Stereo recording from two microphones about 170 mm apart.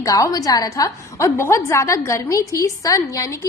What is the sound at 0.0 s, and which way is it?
A woman's voice, 20° left (ahead or behind).